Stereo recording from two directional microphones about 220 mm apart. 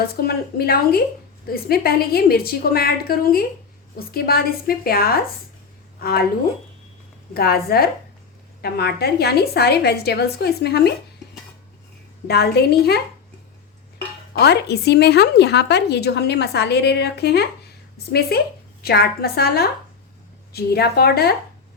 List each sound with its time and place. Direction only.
0.3 s speech: 45° left (ahead or behind)
7.3 s speech: 45° left (ahead or behind)
12.3 s speech: 45° left (ahead or behind)
14.3 s a woman's voice: 50° left (ahead or behind)